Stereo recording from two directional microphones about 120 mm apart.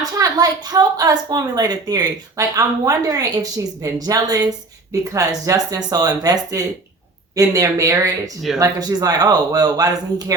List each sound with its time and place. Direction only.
0.0 s a woman's voice: 30° right (ahead or behind)